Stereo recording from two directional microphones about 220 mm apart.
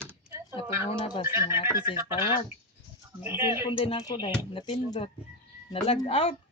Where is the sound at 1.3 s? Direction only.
10° right (ahead or behind).